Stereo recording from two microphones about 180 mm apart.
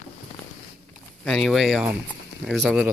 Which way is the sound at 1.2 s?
Centre (ahead or behind).